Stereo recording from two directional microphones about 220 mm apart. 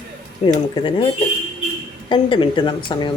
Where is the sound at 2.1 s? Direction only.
20° left (ahead or behind).